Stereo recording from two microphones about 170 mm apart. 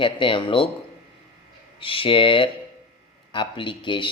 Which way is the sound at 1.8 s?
30° left (ahead or behind).